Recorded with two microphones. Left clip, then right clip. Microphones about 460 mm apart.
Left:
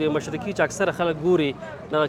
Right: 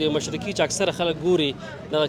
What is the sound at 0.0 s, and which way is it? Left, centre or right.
Speech, centre.